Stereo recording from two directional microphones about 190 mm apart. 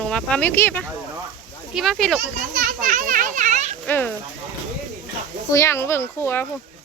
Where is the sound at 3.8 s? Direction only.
10° left (ahead or behind).